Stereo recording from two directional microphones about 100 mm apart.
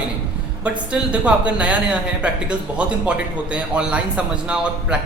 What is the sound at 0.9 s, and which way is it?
A man's voice, 15° right (ahead or behind).